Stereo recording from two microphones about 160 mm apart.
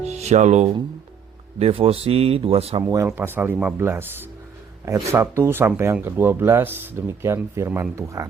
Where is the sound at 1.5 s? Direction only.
40° right (ahead or behind).